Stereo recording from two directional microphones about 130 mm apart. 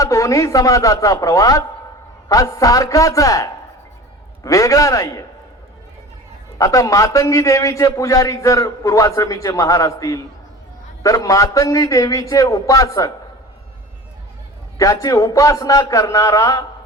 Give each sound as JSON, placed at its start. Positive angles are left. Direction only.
{"t": 0.0, "sound": "a man's voice", "side_deg": 25}
{"t": 6.6, "sound": "a man's voice", "side_deg": 25}
{"t": 14.8, "sound": "a man's voice", "side_deg": 25}